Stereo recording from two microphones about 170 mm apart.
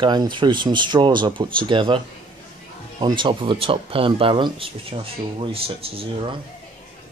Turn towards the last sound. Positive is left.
turn(degrees=-35)  # may be behind; listen again after turning